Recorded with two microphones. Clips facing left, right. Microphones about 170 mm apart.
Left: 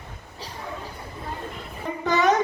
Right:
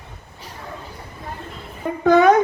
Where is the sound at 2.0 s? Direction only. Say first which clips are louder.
Right 8 dB; 55° right (ahead or behind).